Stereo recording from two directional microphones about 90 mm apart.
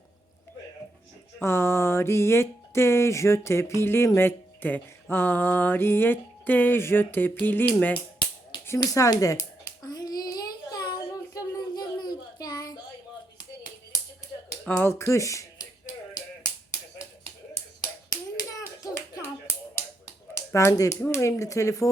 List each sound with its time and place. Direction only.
1.4 s speech: 30° left (ahead or behind)
8.8 s a sound: 40° left (ahead or behind)
14.6 s speech: 20° left (ahead or behind)
14.9 s a sound: 35° left (ahead or behind)
18.1 s hands: 45° left (ahead or behind)
20.3 s speech: 30° left (ahead or behind)